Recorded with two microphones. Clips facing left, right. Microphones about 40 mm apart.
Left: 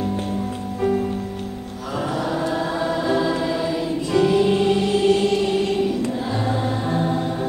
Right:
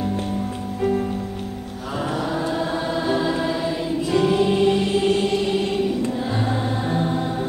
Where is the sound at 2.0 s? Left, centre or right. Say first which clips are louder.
Left 1 dB; centre.